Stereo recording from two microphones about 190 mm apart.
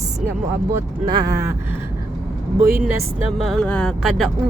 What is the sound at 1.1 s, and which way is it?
Speech, 20° right (ahead or behind).